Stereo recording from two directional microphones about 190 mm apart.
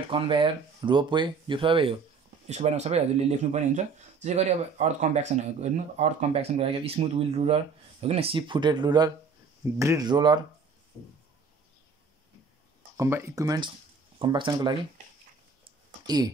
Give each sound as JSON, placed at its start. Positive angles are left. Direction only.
{"t": 0.1, "sound": "speech", "side_deg": -25}
{"t": 12.9, "sound": "speech", "side_deg": -15}